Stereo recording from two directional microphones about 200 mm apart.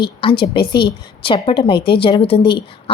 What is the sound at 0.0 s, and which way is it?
A woman's voice, 25° left (ahead or behind).